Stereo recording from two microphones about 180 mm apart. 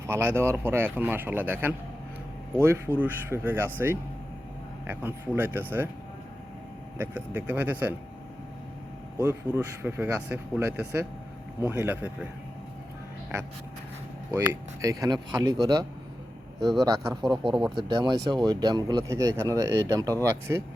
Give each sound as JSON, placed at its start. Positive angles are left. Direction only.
{"t": 0.1, "sound": "speech", "side_deg": -15}
{"t": 7.0, "sound": "speech", "side_deg": -10}
{"t": 9.1, "sound": "speech", "side_deg": -10}
{"t": 14.3, "sound": "speech", "side_deg": -15}
{"t": 17.2, "sound": "speech", "side_deg": 0}
{"t": 17.8, "sound": "speech", "side_deg": -25}